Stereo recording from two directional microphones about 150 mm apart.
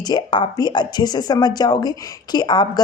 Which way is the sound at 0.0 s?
30° left (ahead or behind).